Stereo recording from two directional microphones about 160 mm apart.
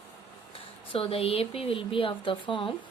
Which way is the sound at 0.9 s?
35° left (ahead or behind).